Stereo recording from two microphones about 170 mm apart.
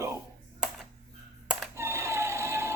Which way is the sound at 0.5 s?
Centre (ahead or behind).